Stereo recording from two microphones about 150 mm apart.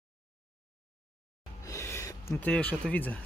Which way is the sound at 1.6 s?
20° left (ahead or behind).